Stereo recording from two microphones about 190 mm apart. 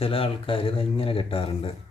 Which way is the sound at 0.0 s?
30° left (ahead or behind).